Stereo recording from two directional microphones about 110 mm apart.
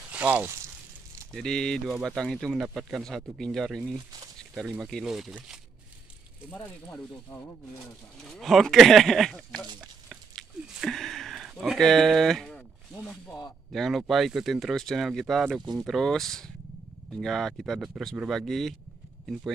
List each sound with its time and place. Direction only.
0.1 s speech: 15° right (ahead or behind)
1.3 s speech: 5° left (ahead or behind)
3.9 s speech: 30° right (ahead or behind)
4.4 s speech: centre (ahead or behind)
6.5 s speech: 15° left (ahead or behind)
8.2 s speech: centre (ahead or behind)
9.8 s a sound: 5° right (ahead or behind)
13.7 s speech: centre (ahead or behind)